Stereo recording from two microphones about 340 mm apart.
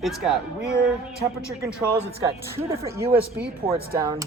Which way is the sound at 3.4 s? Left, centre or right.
Right.